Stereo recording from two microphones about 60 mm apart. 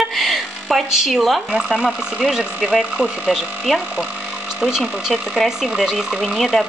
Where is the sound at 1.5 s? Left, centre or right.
Centre.